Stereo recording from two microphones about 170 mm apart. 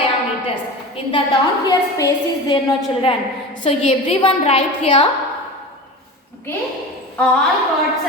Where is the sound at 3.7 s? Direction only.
35° left (ahead or behind).